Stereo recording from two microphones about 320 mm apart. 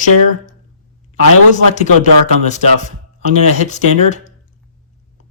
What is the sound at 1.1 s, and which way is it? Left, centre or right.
Speech, left.